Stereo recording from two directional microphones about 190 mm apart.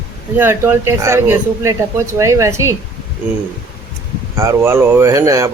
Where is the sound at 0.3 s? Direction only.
10° right (ahead or behind).